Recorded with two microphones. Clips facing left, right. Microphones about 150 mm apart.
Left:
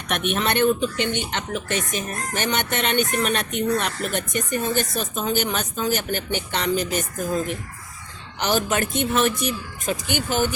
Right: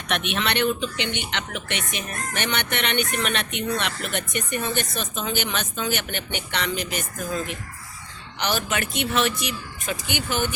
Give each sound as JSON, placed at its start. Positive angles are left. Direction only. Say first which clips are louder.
{"t": 0.1, "sound": "a man's voice", "louder": "left 3 dB", "side_deg": 45}
{"t": 8.4, "sound": "a man's voice", "louder": "left 4 dB", "side_deg": 45}